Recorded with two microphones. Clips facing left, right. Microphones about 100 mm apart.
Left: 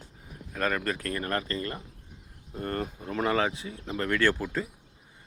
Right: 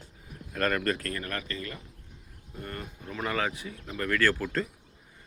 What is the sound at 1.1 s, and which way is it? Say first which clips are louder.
Speech: left 5 dB; 35° left (ahead or behind).